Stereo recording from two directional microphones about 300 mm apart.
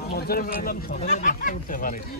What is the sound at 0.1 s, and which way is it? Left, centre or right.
Speech, left.